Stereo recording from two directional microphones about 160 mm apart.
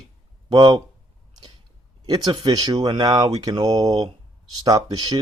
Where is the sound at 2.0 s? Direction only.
25° right (ahead or behind).